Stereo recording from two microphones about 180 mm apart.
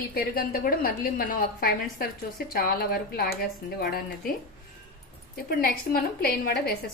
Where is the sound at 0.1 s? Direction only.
55° left (ahead or behind).